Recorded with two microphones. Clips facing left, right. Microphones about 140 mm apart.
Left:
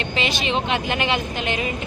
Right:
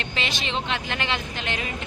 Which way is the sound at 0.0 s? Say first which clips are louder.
Left 6 dB; 5° left (ahead or behind).